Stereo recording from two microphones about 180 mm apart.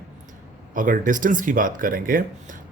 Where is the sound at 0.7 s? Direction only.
45° right (ahead or behind).